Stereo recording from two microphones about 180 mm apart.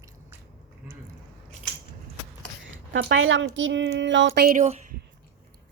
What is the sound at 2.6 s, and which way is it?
A woman's voice, 85° right.